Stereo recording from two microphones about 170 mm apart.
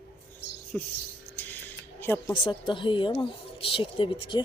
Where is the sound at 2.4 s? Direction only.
30° left (ahead or behind).